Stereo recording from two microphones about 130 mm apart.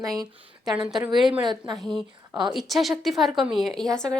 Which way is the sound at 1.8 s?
Centre (ahead or behind).